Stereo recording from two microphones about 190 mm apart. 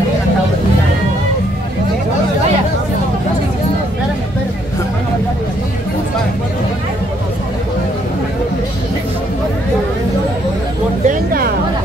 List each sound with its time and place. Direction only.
11.1 s music: 50° right (ahead or behind)